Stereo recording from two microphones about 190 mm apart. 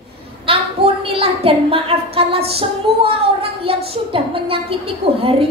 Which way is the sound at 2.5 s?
30° right (ahead or behind).